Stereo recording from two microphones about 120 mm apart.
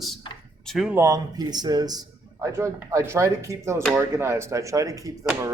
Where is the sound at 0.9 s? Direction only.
25° right (ahead or behind).